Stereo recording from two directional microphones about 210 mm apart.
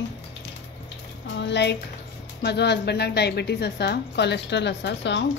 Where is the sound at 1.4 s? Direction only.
55° left (ahead or behind).